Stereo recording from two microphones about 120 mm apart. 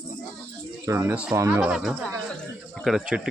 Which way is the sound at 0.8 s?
20° right (ahead or behind).